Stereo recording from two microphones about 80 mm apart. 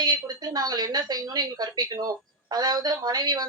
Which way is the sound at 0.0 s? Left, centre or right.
Right.